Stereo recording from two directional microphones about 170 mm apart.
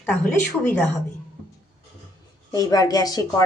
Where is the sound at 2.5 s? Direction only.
20° left (ahead or behind).